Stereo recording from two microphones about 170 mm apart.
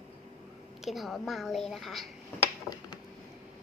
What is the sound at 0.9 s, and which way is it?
A woman's voice, centre (ahead or behind).